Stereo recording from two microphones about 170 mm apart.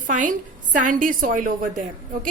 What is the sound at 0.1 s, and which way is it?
A woman's voice, 50° right (ahead or behind).